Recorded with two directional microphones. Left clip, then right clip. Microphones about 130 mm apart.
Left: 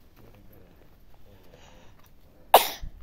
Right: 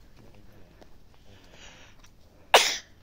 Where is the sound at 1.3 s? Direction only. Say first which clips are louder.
Right 3 dB; 45° left (ahead or behind).